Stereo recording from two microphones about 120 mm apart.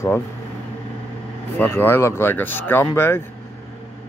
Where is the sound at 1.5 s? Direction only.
20° left (ahead or behind).